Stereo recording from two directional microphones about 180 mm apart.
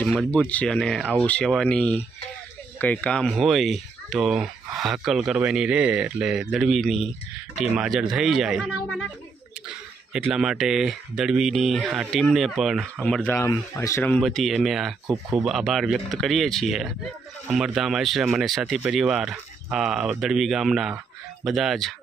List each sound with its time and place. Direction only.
0.0 s speech: 5° left (ahead or behind)
10.1 s speech: 5° right (ahead or behind)